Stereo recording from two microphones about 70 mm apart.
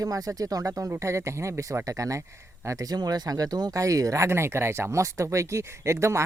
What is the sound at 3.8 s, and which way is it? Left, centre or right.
Speech, right.